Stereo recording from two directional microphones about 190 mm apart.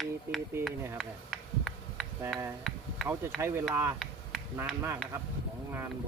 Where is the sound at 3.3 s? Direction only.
15° right (ahead or behind).